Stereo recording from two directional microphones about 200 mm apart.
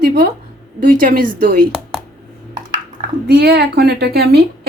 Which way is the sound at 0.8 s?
45° right (ahead or behind).